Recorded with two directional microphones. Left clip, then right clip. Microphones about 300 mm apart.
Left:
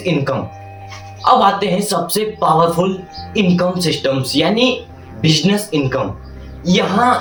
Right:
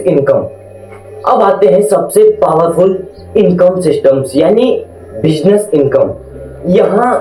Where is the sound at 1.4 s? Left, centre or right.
Left.